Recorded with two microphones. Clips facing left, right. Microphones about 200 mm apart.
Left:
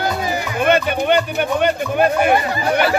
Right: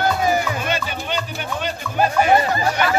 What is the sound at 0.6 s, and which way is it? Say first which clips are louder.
Speech: left 9 dB; 60° left (ahead or behind).